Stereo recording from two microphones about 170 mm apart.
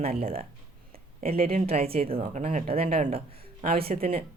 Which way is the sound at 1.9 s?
35° right (ahead or behind).